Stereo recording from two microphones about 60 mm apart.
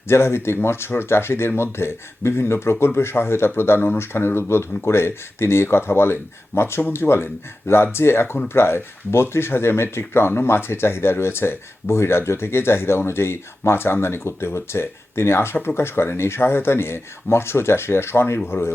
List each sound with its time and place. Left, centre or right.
0.1 s speech: left